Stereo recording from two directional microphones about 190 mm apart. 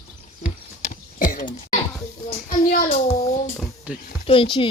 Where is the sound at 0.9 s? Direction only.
45° left (ahead or behind).